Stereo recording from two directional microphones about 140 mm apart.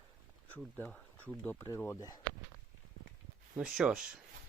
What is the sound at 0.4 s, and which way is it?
Speech, 10° left (ahead or behind).